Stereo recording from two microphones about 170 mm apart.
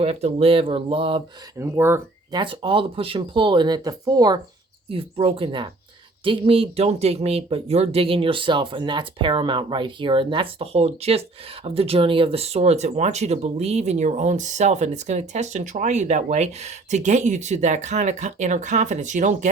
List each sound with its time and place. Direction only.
0.0 s speech: 35° right (ahead or behind)
1.5 s speech: 15° right (ahead or behind)
2.4 s speech: 30° right (ahead or behind)
4.9 s speech: 35° right (ahead or behind)